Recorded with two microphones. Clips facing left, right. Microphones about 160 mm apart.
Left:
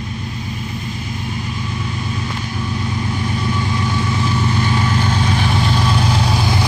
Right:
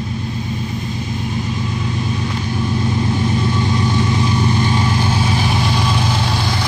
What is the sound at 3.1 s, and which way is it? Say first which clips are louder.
Vehicle: right 3 dB; 25° right (ahead or behind).